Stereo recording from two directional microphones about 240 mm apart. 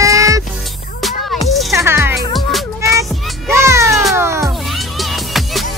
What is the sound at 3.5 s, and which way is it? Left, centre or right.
Cat, centre.